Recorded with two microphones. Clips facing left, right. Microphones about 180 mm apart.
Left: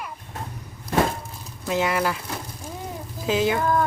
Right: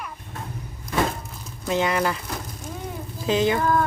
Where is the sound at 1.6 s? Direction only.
5° left (ahead or behind).